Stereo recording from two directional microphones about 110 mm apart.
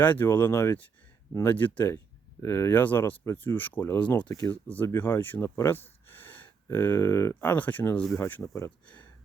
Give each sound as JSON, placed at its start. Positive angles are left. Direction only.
{"t": 0.0, "sound": "speech", "side_deg": 15}
{"t": 2.4, "sound": "speech", "side_deg": 25}
{"t": 7.5, "sound": "speech", "side_deg": 15}